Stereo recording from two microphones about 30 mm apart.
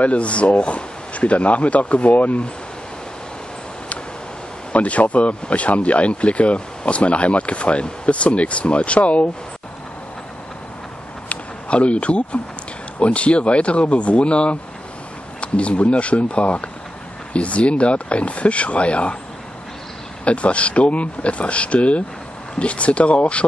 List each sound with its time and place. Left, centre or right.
0.0 s speech: left
4.7 s speech: left
11.2 s a sound: left
13.0 s speech: left
20.2 s speech: left